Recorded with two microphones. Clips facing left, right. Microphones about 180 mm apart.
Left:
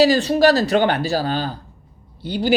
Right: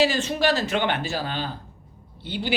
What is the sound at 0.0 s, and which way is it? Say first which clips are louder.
Speech: left 7 dB; 35° left (ahead or behind).